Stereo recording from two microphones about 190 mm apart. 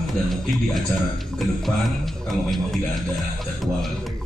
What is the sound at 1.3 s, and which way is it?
Speech, centre (ahead or behind).